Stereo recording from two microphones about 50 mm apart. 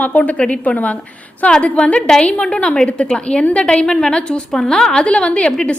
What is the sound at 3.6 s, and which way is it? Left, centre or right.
A woman's voice, centre.